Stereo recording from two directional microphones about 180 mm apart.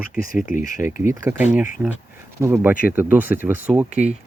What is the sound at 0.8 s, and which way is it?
Speech, 15° right (ahead or behind).